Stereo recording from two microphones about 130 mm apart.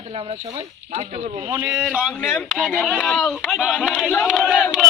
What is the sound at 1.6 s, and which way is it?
Speech, 5° right (ahead or behind).